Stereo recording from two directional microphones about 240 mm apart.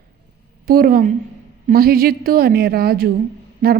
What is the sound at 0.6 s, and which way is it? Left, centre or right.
A woman's voice, right.